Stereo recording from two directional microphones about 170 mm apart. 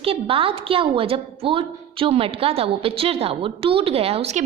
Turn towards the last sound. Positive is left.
turn(degrees=-40)  # may be behind; listen again after turning